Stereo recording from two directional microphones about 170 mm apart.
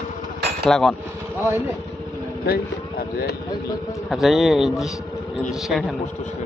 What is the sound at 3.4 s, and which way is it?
Speech, 20° left (ahead or behind).